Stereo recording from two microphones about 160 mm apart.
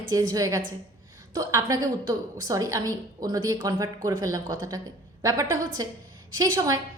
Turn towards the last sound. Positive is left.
turn(degrees=-20)  # may be behind; listen again after turning